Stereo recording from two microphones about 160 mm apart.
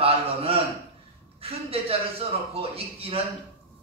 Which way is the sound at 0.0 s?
35° right (ahead or behind).